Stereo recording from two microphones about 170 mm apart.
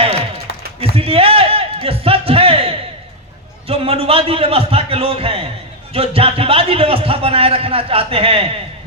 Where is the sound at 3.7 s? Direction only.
35° right (ahead or behind).